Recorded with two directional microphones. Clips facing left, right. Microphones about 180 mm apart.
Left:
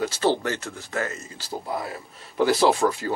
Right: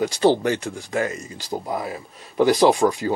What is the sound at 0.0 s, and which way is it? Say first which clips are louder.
Speech: right 5 dB; 15° right (ahead or behind).